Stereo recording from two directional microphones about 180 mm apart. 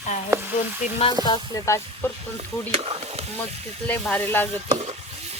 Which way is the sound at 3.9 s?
10° left (ahead or behind).